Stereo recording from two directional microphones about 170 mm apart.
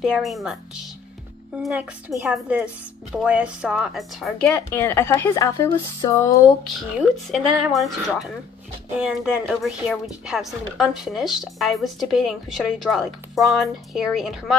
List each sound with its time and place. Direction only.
0.0 s speech: centre (ahead or behind)
4.6 s a woman's voice: 15° left (ahead or behind)
7.0 s speech: centre (ahead or behind)